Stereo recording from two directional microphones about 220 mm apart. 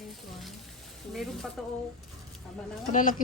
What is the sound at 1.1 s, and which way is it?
Speech, centre (ahead or behind).